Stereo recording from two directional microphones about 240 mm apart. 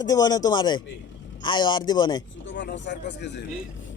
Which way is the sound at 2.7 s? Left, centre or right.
Left.